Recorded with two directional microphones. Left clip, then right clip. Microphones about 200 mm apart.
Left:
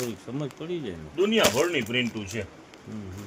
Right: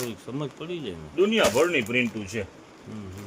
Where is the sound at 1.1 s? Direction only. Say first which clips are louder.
Right 1 dB; 50° right (ahead or behind).